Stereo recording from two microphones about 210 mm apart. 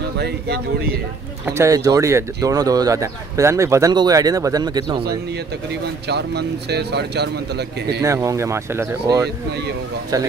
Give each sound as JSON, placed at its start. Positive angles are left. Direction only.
{"t": 0.2, "sound": "speech", "side_deg": -50}
{"t": 1.4, "sound": "speech", "side_deg": -15}
{"t": 6.0, "sound": "speech", "side_deg": -50}
{"t": 8.0, "sound": "speech", "side_deg": -15}